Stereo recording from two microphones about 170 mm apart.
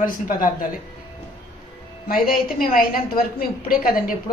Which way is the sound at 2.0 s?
60° left (ahead or behind).